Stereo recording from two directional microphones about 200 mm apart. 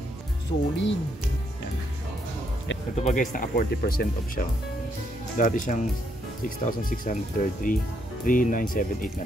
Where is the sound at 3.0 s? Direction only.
40° left (ahead or behind).